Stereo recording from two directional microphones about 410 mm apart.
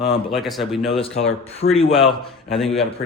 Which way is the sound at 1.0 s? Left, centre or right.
Centre.